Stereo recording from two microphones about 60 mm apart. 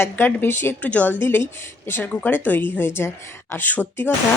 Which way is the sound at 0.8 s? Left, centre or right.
Left.